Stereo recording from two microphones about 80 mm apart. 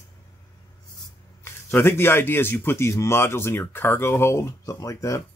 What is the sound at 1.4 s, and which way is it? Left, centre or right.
A man's voice, left.